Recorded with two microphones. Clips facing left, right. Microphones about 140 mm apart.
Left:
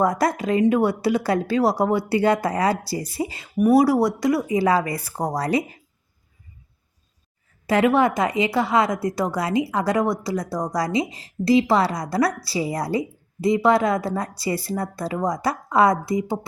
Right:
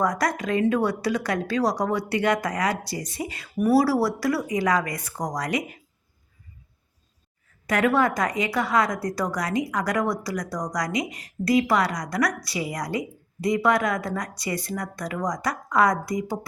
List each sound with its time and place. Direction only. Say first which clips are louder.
0.0 s a woman's voice: left 4 dB; 25° left (ahead or behind)
7.7 s a woman's voice: left 3 dB; 25° left (ahead or behind)